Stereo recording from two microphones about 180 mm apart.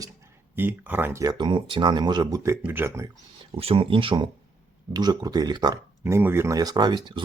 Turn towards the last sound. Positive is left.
turn(degrees=-25)  # may be behind; listen again after turning